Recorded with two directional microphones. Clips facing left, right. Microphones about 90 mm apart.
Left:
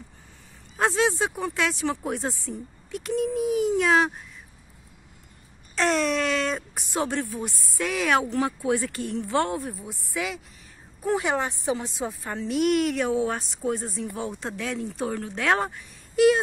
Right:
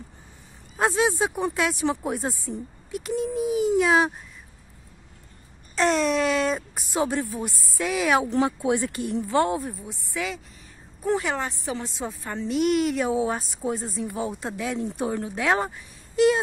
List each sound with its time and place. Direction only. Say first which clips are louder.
0.7 s speech: right 1 dB; 10° right (ahead or behind)
5.8 s speech: right 2 dB; centre (ahead or behind)
8.3 s speech: right 2 dB; 20° right (ahead or behind)
9.3 s speech: right 3 dB; 5° right (ahead or behind)
9.8 s speech: even; 10° left (ahead or behind)
11.2 s speech: left 3 dB; 15° left (ahead or behind); by 15.4 s 15° right (ahead or behind)
15.4 s speech: even; centre (ahead or behind)